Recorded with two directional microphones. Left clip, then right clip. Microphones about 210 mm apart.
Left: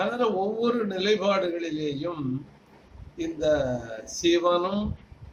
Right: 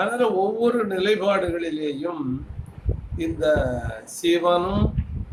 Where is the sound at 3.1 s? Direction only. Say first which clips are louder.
Right 3 dB; 5° right (ahead or behind).